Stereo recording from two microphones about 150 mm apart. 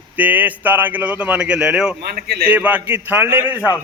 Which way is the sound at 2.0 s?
90° right.